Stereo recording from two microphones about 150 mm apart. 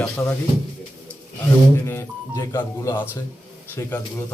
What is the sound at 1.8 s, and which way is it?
A man's voice, 15° left (ahead or behind).